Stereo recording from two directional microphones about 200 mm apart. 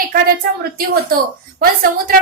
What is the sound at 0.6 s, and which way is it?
A woman's voice, 50° right (ahead or behind).